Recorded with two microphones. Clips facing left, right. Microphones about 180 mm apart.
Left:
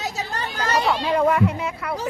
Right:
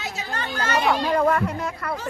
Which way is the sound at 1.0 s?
10° left (ahead or behind).